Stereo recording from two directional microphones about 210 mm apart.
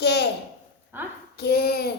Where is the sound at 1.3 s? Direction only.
50° left (ahead or behind).